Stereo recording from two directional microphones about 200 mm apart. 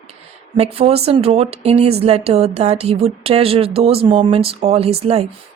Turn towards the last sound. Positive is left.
turn(degrees=-30)  # may be behind; listen again after turning